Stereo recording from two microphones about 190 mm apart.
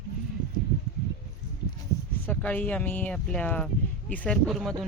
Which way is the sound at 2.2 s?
10° left (ahead or behind).